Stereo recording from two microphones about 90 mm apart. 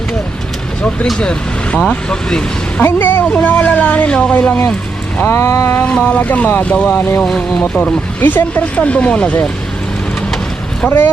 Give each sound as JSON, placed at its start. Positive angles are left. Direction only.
{"t": 1.2, "sound": "speech", "side_deg": 10}
{"t": 2.8, "sound": "speech", "side_deg": 20}
{"t": 5.1, "sound": "vehicle", "side_deg": 30}
{"t": 5.8, "sound": "speech", "side_deg": 15}